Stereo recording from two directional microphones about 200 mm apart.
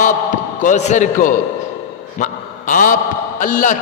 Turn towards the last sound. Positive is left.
turn(degrees=40)  # may be behind; listen again after turning